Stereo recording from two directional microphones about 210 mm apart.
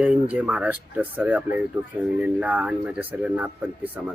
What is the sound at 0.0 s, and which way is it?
Speech, 5° right (ahead or behind).